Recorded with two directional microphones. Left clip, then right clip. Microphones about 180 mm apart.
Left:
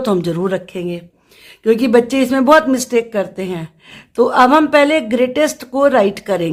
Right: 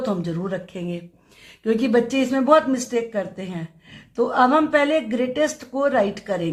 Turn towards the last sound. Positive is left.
turn(degrees=45)  # may be behind; listen again after turning